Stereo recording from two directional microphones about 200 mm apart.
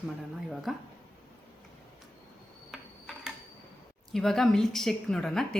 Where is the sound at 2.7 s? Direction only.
Centre (ahead or behind).